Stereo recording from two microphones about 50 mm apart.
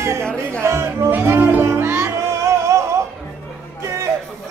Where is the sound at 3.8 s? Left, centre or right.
Right.